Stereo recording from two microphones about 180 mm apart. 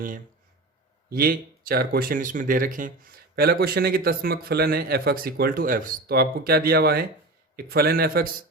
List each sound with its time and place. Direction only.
1.1 s speech: 55° right (ahead or behind)